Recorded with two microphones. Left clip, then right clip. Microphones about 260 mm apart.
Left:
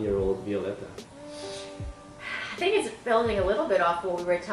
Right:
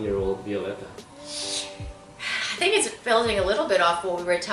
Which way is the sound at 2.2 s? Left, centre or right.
Centre.